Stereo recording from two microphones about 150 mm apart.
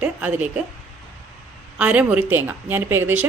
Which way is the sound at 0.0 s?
10° right (ahead or behind).